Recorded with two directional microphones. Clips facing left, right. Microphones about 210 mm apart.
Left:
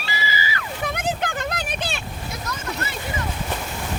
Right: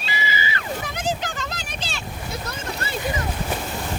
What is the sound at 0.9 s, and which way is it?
Vehicle, 55° left (ahead or behind).